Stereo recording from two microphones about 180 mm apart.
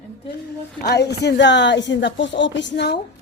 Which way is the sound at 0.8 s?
65° left (ahead or behind).